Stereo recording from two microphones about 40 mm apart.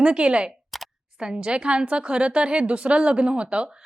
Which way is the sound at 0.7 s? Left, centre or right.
Centre.